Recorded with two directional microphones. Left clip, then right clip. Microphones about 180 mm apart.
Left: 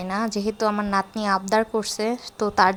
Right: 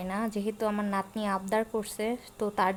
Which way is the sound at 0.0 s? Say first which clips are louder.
Left 7 dB; 20° left (ahead or behind).